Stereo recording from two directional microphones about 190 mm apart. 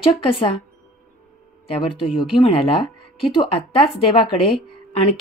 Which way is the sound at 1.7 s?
30° left (ahead or behind).